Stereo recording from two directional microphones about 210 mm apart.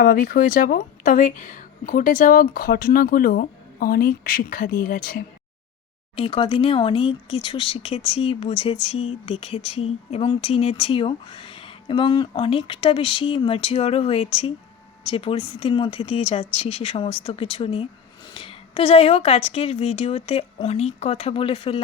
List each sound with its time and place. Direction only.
0.0 s speech: 45° left (ahead or behind)
6.1 s speech: 25° left (ahead or behind)